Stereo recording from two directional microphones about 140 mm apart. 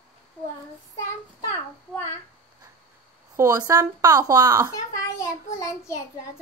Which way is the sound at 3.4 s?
25° right (ahead or behind).